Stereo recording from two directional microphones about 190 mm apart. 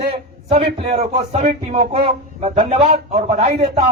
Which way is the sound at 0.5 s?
35° right (ahead or behind).